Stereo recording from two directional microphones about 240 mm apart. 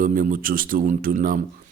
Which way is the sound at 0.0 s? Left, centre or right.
Right.